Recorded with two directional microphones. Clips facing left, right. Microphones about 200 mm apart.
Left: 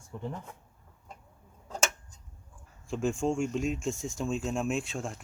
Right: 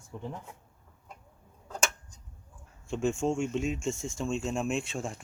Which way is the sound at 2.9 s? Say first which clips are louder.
Even; centre (ahead or behind).